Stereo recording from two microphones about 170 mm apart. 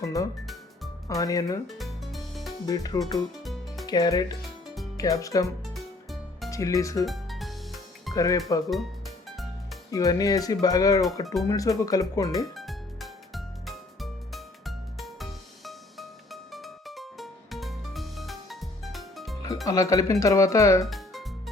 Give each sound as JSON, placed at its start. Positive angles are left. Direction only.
{"t": 0.0, "sound": "speech", "side_deg": 20}
{"t": 1.6, "sound": "music", "side_deg": 0}
{"t": 2.6, "sound": "speech", "side_deg": 20}
{"t": 3.4, "sound": "music", "side_deg": 0}
{"t": 3.8, "sound": "speech", "side_deg": 20}
{"t": 5.7, "sound": "music", "side_deg": 0}
{"t": 6.5, "sound": "speech", "side_deg": 20}
{"t": 7.0, "sound": "music", "side_deg": 0}
{"t": 8.1, "sound": "speech", "side_deg": 20}
{"t": 8.7, "sound": "music", "side_deg": 0}
{"t": 9.9, "sound": "speech", "side_deg": 20}
{"t": 12.5, "sound": "music", "side_deg": 0}
{"t": 19.6, "sound": "speech", "side_deg": 20}
{"t": 20.8, "sound": "music", "side_deg": 0}